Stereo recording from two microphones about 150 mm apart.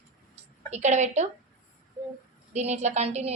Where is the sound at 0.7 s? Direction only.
50° right (ahead or behind).